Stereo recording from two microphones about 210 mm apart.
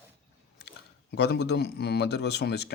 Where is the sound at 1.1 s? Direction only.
55° left (ahead or behind).